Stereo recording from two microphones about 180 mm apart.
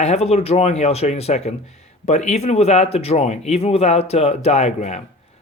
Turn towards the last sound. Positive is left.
turn(degrees=40)  # may be behind; listen again after turning